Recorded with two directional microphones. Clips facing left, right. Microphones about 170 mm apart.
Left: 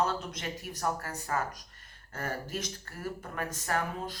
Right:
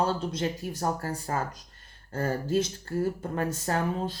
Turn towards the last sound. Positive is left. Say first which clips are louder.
# right 5 dB
turn(degrees=-30)  # may be behind; listen again after turning